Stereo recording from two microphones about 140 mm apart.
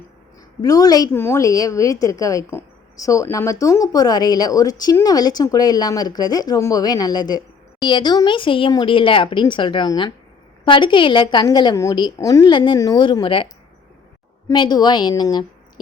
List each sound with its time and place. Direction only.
0.6 s a woman's voice: 25° left (ahead or behind)
14.5 s a woman's voice: 30° left (ahead or behind)